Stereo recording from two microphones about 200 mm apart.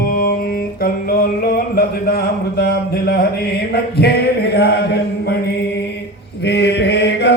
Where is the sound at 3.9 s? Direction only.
55° left (ahead or behind).